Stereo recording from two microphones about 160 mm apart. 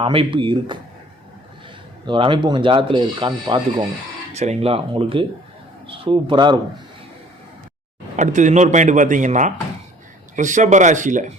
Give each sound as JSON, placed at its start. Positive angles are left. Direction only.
{"t": 0.0, "sound": "speech", "side_deg": -35}
{"t": 2.0, "sound": "speech", "side_deg": -30}
{"t": 4.4, "sound": "speech", "side_deg": -40}
{"t": 8.1, "sound": "a man's voice", "side_deg": -50}